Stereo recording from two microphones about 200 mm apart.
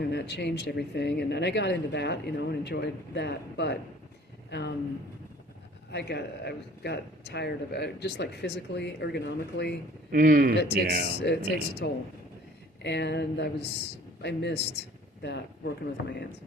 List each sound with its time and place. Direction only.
0.0 s speech: 55° left (ahead or behind)
5.9 s speech: 55° left (ahead or behind)
10.1 s a man's voice: 45° right (ahead or behind)
11.2 s speech: 55° left (ahead or behind)